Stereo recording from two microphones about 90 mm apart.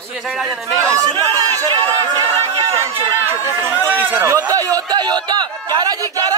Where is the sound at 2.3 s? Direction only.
90° right.